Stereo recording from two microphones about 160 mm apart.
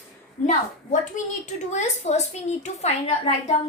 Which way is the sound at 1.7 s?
45° left (ahead or behind).